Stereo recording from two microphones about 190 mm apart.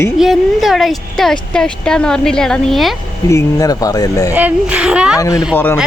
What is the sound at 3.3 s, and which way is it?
Speech, 15° left (ahead or behind).